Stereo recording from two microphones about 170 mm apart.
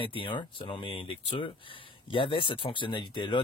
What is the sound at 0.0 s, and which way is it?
Speech, 30° left (ahead or behind).